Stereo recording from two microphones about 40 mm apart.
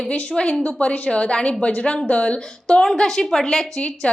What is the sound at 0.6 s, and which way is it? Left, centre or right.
A woman's voice, left.